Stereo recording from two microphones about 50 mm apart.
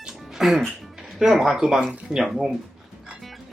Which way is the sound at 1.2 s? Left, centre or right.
Centre.